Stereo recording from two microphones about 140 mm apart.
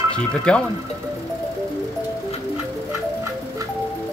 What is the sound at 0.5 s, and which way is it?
Speech, 5° left (ahead or behind).